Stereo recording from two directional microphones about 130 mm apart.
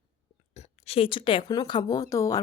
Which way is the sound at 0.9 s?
45° left (ahead or behind).